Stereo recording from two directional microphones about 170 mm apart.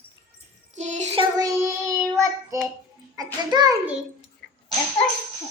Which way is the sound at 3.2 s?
20° right (ahead or behind).